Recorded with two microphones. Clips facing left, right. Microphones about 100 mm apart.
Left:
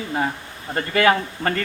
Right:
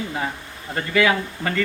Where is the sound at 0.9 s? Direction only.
45° left (ahead or behind).